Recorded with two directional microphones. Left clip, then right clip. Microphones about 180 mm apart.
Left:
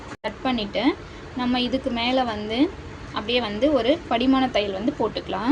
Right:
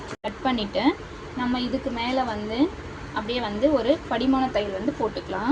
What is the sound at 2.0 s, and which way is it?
A woman's voice, 20° left (ahead or behind).